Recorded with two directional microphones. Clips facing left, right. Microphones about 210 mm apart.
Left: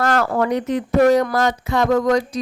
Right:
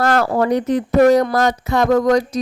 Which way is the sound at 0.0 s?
35° right (ahead or behind).